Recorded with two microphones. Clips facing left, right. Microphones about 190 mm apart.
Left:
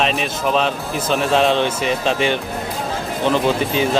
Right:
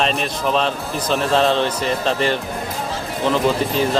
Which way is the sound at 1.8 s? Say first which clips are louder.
Left 1 dB; 85° left.